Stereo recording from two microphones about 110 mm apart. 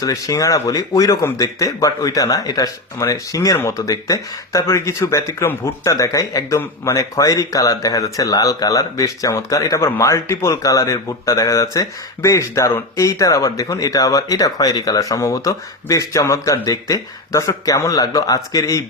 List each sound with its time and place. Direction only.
0.0 s speech: 30° left (ahead or behind)